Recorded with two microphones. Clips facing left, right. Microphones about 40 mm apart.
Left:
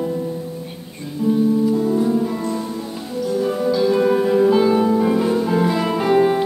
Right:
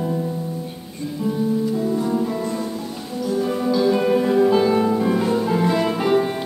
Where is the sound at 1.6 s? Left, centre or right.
Centre.